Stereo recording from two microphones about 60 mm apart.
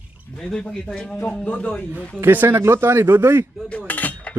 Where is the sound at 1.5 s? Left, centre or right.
Centre.